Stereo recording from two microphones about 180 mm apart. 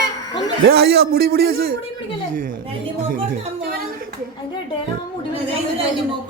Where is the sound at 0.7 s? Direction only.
60° right (ahead or behind).